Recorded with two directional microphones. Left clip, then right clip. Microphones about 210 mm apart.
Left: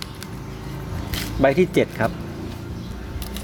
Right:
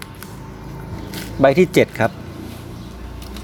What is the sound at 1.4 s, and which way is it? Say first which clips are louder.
Speech: right 5 dB; 25° right (ahead or behind).